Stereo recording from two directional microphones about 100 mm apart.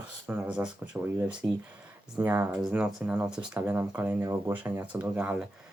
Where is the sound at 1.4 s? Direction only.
25° right (ahead or behind).